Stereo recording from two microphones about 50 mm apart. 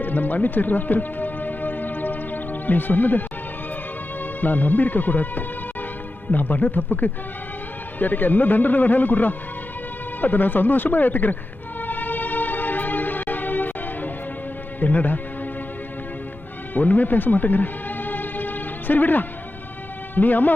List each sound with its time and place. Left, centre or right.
0.0 s music: left
4.2 s a man's voice: left
11.8 s music: left
14.8 s a man's voice: left
16.7 s music: left
20.1 s a man's voice: left